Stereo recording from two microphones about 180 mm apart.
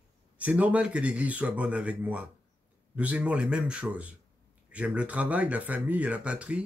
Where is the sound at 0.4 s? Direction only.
10° right (ahead or behind).